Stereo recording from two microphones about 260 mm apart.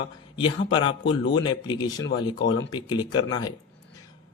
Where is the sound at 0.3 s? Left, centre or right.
Centre.